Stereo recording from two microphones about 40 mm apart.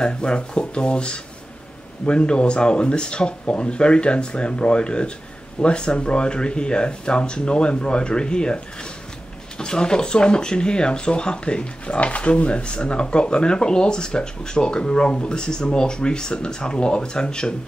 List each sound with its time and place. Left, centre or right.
0.0 s speech: left
9.6 s speech: centre